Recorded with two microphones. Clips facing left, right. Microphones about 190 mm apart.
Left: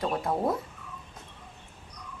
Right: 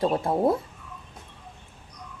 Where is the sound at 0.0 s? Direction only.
30° right (ahead or behind).